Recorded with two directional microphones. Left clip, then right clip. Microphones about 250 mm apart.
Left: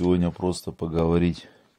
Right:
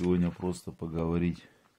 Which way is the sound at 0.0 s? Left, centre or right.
Left.